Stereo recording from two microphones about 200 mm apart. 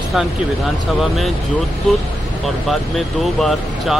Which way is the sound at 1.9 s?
Centre (ahead or behind).